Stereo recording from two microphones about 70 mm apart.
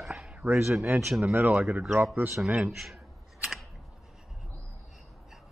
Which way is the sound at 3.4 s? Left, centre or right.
Centre.